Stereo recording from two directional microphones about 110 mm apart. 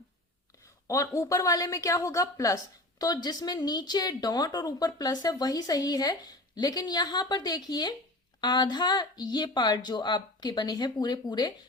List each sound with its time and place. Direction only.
0.9 s a woman's voice: 30° left (ahead or behind)